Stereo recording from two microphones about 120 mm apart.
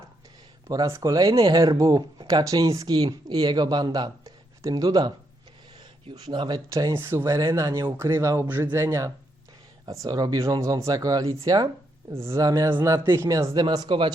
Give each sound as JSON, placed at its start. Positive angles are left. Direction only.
{"t": 0.7, "sound": "speech", "side_deg": -25}
{"t": 6.1, "sound": "speech", "side_deg": -35}
{"t": 6.7, "sound": "speech", "side_deg": -25}
{"t": 7.3, "sound": "speech", "side_deg": -30}
{"t": 12.1, "sound": "speech", "side_deg": -20}
{"t": 13.5, "sound": "speech", "side_deg": -40}